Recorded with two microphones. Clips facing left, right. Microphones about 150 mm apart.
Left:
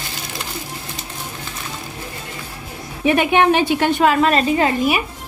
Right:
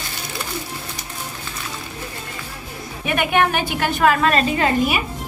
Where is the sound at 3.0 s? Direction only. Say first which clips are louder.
Left 5 dB; 30° left (ahead or behind).